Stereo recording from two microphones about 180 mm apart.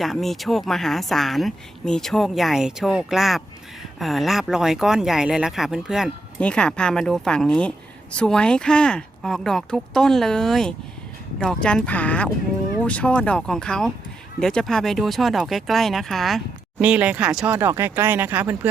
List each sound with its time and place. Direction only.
0.0 s speech: centre (ahead or behind)